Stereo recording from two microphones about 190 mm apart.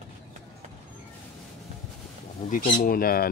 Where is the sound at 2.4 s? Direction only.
45° left (ahead or behind).